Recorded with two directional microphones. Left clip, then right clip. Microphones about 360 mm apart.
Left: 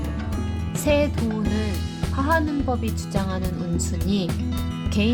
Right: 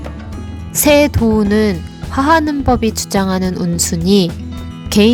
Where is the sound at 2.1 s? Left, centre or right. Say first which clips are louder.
Right 10 dB; right.